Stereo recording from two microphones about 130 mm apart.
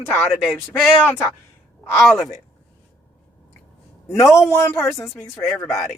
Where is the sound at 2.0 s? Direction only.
Centre (ahead or behind).